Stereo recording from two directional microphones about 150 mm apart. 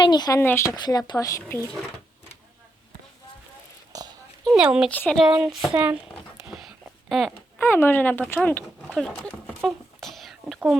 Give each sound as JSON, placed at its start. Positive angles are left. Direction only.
{"t": 0.0, "sound": "speech", "side_deg": 30}
{"t": 0.3, "sound": "speech", "side_deg": 15}
{"t": 3.9, "sound": "a sound", "side_deg": -25}
{"t": 4.6, "sound": "speech", "side_deg": -5}
{"t": 4.9, "sound": "speech", "side_deg": 10}
{"t": 5.4, "sound": "speech", "side_deg": -5}
{"t": 5.7, "sound": "speech", "side_deg": -15}
{"t": 6.5, "sound": "a sound", "side_deg": 0}
{"t": 7.6, "sound": "speech", "side_deg": 15}
{"t": 9.6, "sound": "a sound", "side_deg": 0}